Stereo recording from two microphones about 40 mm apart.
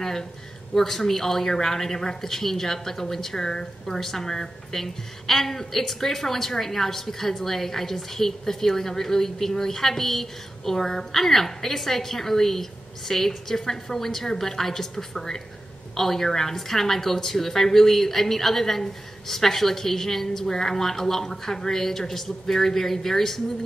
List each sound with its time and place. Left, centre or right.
0.0 s speech: centre